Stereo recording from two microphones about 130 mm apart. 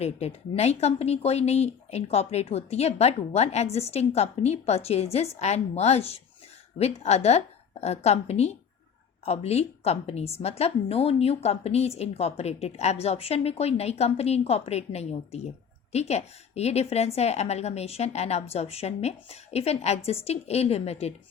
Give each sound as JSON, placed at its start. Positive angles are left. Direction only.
{"t": 0.0, "sound": "a woman's voice", "side_deg": 55}